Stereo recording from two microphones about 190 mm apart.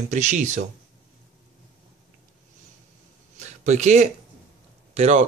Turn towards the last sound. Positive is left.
turn(degrees=-35)  # may be behind; listen again after turning